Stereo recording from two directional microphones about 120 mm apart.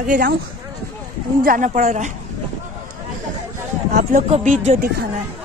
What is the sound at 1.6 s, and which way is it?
Speech, 85° right.